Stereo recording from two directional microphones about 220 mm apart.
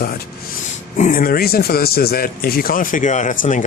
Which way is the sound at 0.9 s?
35° left (ahead or behind).